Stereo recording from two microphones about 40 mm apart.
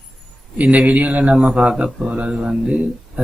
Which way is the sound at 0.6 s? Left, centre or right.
Right.